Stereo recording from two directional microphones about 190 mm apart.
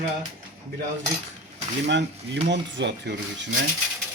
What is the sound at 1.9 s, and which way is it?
Speech, 70° right (ahead or behind).